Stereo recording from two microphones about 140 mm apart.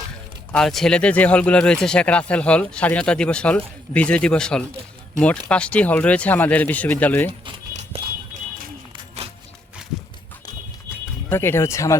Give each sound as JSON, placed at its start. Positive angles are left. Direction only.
{"t": 0.5, "sound": "speech", "side_deg": 0}
{"t": 7.7, "sound": "clip-clop", "side_deg": -55}
{"t": 11.3, "sound": "speech", "side_deg": 15}